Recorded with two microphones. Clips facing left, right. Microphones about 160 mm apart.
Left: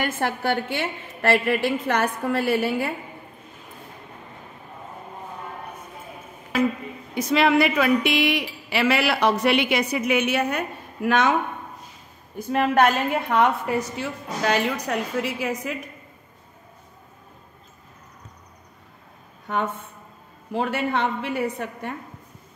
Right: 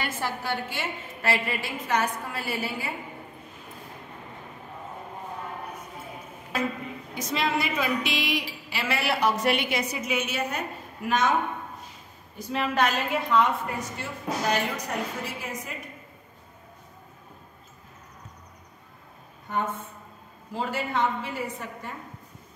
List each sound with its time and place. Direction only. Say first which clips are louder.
0.0 s a woman's voice: left 6 dB; 60° left (ahead or behind)
7.2 s a woman's voice: left 9 dB; 65° left (ahead or behind)
11.1 s a woman's voice: left 4 dB; 75° left (ahead or behind)
12.4 s a woman's voice: left 6 dB; 50° left (ahead or behind); by 15.8 s 90° left
19.4 s a woman's voice: left 3 dB; 75° left (ahead or behind)